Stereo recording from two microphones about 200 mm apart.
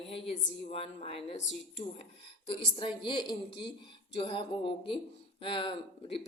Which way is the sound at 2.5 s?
25° left (ahead or behind).